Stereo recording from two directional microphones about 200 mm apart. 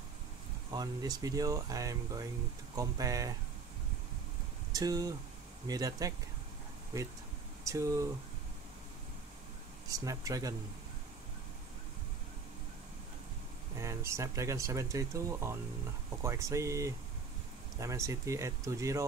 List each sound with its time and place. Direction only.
0.7 s speech: 20° right (ahead or behind)
4.7 s speech: 20° right (ahead or behind)
9.8 s speech: 15° right (ahead or behind)
13.7 s speech: 15° right (ahead or behind)